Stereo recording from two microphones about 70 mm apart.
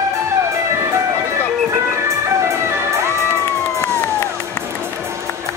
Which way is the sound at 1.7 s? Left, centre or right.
Right.